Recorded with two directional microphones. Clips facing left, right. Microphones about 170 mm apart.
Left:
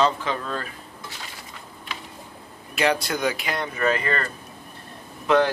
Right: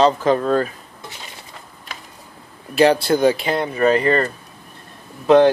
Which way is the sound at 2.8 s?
30° right (ahead or behind).